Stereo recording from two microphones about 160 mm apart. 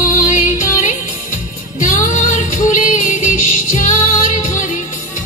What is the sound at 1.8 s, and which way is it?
Music, 55° left (ahead or behind).